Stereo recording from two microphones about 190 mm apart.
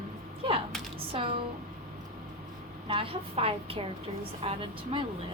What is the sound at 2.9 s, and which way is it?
A woman's voice, 30° right (ahead or behind).